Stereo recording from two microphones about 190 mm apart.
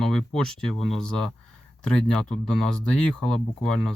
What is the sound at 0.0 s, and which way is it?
Speech, centre (ahead or behind).